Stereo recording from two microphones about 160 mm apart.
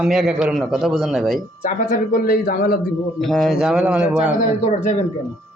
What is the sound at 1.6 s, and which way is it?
Speech, 60° left (ahead or behind).